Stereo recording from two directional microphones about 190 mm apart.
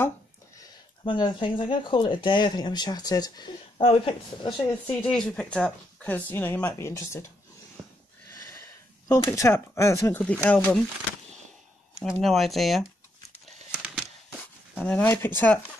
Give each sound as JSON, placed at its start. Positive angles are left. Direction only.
{"t": 0.6, "sound": "speech", "side_deg": 25}
{"t": 5.1, "sound": "speech", "side_deg": 5}
{"t": 8.3, "sound": "speech", "side_deg": 15}
{"t": 12.0, "sound": "speech", "side_deg": 0}
{"t": 13.7, "sound": "a sound", "side_deg": -5}
{"t": 14.8, "sound": "speech", "side_deg": 10}